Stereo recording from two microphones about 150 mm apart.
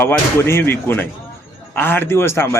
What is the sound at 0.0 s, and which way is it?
A man's voice, 15° left (ahead or behind).